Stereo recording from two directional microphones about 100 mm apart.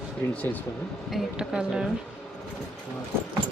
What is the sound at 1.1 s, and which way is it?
Speech, 10° right (ahead or behind).